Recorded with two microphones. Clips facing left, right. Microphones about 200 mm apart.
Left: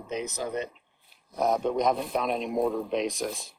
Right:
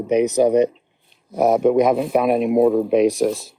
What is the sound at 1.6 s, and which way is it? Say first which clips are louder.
Speech: right 12 dB; 55° right (ahead or behind).